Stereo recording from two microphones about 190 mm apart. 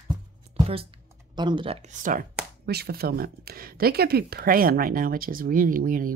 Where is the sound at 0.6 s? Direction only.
30° right (ahead or behind).